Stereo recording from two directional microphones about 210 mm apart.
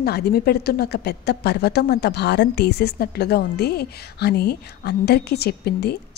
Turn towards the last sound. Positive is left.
turn(degrees=50)  # may be behind; listen again after turning